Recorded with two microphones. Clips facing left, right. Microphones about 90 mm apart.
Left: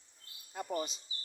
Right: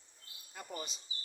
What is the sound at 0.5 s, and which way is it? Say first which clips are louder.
Speech: left 8 dB; 30° left (ahead or behind).